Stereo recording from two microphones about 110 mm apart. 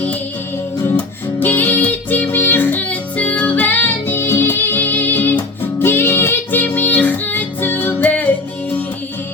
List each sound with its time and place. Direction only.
1.4 s music: 15° left (ahead or behind)